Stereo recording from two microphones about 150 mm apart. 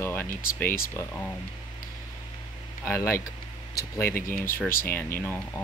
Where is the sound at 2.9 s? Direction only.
15° left (ahead or behind).